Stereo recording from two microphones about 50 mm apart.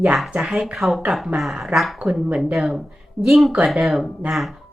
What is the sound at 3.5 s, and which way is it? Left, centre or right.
Speech, right.